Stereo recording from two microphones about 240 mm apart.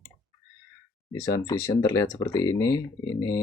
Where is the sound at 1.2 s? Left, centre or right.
Centre.